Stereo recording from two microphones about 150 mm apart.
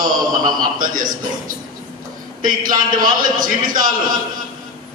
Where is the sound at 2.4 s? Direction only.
65° right (ahead or behind).